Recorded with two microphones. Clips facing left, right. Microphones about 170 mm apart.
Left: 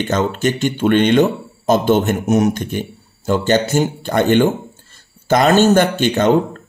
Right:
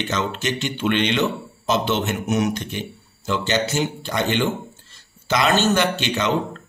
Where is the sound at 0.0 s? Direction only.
50° left (ahead or behind).